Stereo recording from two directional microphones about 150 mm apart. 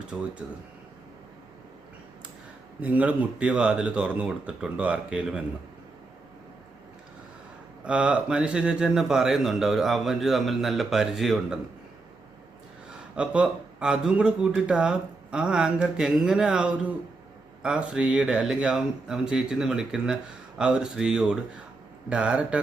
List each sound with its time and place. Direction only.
0.1 s speech: 5° right (ahead or behind)
2.8 s speech: 10° right (ahead or behind)
7.9 s speech: 5° right (ahead or behind)
13.1 s speech: 5° right (ahead or behind)